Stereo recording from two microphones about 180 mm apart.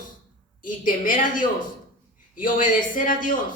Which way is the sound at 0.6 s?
50° left (ahead or behind).